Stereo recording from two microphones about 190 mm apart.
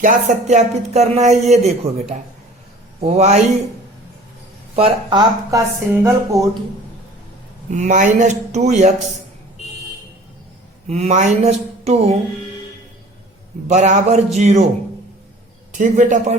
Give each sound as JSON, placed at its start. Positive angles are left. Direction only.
{"t": 0.0, "sound": "speech", "side_deg": -40}
{"t": 4.7, "sound": "speech", "side_deg": -30}
{"t": 5.5, "sound": "speech", "side_deg": -15}
{"t": 7.7, "sound": "speech", "side_deg": -40}
{"t": 10.8, "sound": "speech", "side_deg": -35}
{"t": 13.7, "sound": "speech", "side_deg": -40}
{"t": 15.7, "sound": "speech", "side_deg": -40}